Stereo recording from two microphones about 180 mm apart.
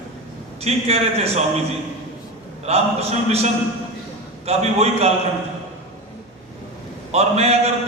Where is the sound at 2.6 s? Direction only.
35° right (ahead or behind).